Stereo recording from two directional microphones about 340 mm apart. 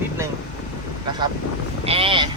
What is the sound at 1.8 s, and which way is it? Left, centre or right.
Speech, centre.